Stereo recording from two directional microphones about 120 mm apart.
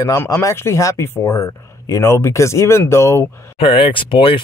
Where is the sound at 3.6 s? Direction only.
50° left (ahead or behind).